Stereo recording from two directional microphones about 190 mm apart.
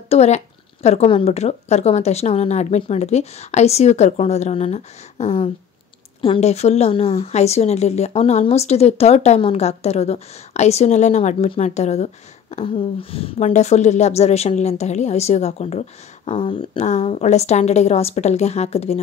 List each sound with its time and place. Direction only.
0.1 s a woman's voice: 35° left (ahead or behind)